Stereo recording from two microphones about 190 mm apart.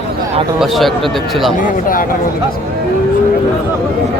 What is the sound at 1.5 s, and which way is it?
Speech, 45° left (ahead or behind).